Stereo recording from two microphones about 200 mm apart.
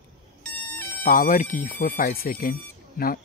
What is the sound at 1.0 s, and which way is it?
Speech, 45° left (ahead or behind).